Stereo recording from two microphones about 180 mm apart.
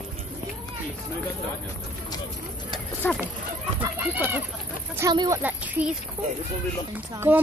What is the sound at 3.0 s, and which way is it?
Speech, 10° left (ahead or behind).